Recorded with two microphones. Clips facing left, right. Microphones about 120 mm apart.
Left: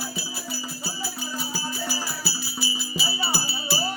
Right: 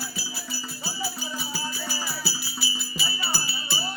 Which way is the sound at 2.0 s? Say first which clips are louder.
Left 1 dB; centre (ahead or behind).